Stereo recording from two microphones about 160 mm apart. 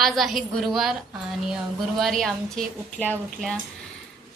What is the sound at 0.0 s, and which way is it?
Speech, centre (ahead or behind).